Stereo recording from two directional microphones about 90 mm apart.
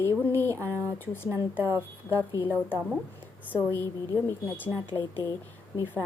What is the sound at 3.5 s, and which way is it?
Speech, 25° left (ahead or behind).